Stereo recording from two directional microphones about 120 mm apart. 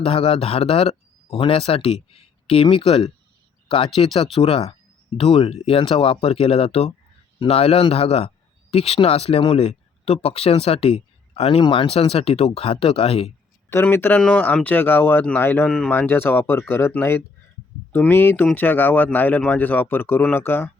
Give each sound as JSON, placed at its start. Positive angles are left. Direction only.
{"t": 0.0, "sound": "speech", "side_deg": 50}
{"t": 13.7, "sound": "speech", "side_deg": 20}